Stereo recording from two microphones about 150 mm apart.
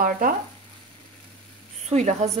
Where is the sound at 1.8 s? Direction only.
45° right (ahead or behind).